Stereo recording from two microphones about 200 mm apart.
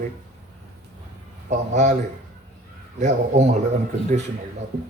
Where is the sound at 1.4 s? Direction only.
35° right (ahead or behind).